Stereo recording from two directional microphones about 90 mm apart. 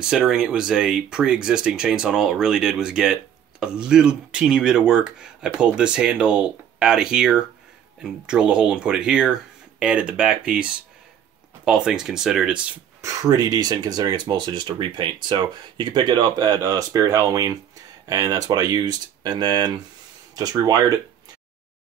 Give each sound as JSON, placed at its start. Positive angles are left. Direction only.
{"t": 0.0, "sound": "speech", "side_deg": -10}
{"t": 13.0, "sound": "speech", "side_deg": -45}
{"t": 16.6, "sound": "speech", "side_deg": -40}
{"t": 20.3, "sound": "speech", "side_deg": -45}